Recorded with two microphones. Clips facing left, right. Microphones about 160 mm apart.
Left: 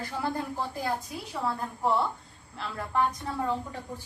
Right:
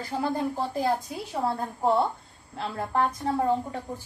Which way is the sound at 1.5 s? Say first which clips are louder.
Right 2 dB; 35° right (ahead or behind).